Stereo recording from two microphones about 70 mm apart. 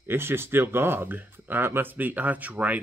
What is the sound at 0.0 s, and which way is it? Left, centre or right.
Speech, right.